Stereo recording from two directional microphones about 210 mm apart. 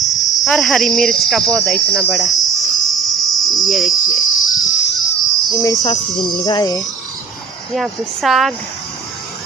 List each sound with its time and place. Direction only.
0.4 s speech: centre (ahead or behind)
2.0 s cricket: centre (ahead or behind)
5.5 s speech: 15° left (ahead or behind)
6.1 s speech: centre (ahead or behind)
6.4 s speech: 15° left (ahead or behind)
7.7 s speech: centre (ahead or behind)